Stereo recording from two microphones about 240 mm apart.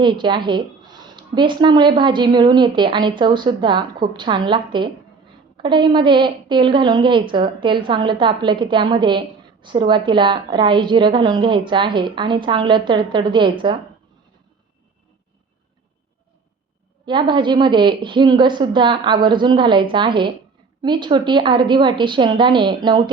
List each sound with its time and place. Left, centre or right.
0.0 s a woman's voice: centre
17.1 s a woman's voice: centre